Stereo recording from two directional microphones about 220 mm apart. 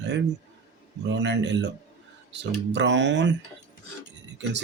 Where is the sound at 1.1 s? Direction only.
50° right (ahead or behind).